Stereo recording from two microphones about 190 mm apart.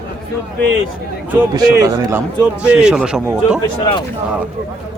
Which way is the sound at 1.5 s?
20° right (ahead or behind).